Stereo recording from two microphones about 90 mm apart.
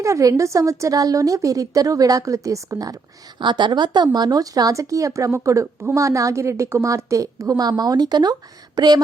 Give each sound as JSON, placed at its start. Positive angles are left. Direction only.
{"t": 0.0, "sound": "speech", "side_deg": -35}
{"t": 3.4, "sound": "speech", "side_deg": -55}